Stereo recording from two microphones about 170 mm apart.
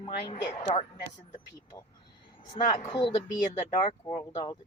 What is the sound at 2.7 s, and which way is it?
Speech, 25° left (ahead or behind).